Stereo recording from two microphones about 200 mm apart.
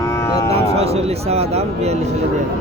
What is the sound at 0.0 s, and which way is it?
Cattle, 15° left (ahead or behind).